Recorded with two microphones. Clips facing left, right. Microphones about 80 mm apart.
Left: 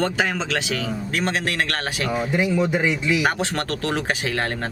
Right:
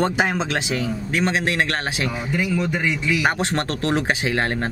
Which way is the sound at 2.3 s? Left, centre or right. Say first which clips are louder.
Left 2 dB; centre.